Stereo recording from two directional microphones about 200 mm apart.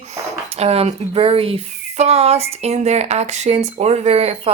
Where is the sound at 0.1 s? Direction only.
30° right (ahead or behind).